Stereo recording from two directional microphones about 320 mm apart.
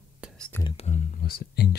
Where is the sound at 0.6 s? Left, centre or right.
Centre.